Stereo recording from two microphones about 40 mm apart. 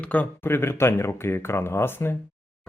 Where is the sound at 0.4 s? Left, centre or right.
Left.